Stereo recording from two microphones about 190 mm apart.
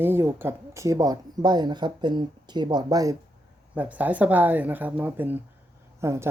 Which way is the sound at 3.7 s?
10° right (ahead or behind).